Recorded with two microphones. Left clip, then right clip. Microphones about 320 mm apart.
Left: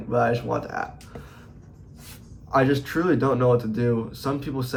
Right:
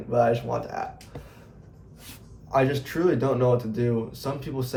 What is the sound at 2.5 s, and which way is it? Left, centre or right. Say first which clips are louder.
Speech: left 2 dB; centre.